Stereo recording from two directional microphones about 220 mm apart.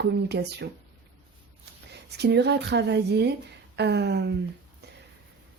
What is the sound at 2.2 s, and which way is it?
A woman's voice, 50° right (ahead or behind).